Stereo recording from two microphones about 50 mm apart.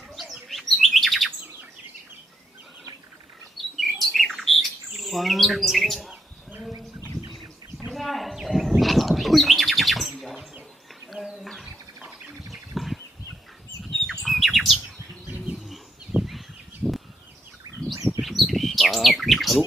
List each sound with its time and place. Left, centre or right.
0.2 s chirp: centre
3.8 s bird: centre
4.9 s chirp: centre
7.9 s bird: centre
12.5 s bird: centre
14.2 s bird: centre
16.1 s bird: right
16.8 s a sound: centre
18.2 s bird: centre